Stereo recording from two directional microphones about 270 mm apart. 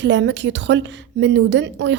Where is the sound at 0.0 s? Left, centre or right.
Right.